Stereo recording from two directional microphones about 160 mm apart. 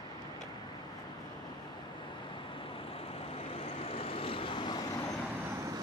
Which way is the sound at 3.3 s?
40° left (ahead or behind).